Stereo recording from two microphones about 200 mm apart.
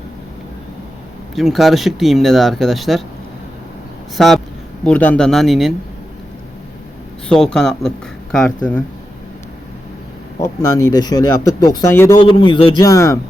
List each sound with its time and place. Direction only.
1.4 s speech: centre (ahead or behind)
4.2 s speech: centre (ahead or behind)
7.3 s speech: 5° left (ahead or behind)
10.3 s speech: 15° left (ahead or behind)
12.2 s a man's voice: 25° left (ahead or behind)